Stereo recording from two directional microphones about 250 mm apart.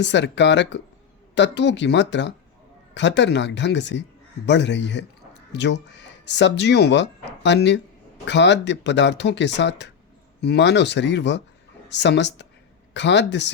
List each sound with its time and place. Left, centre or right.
0.0 s speech: left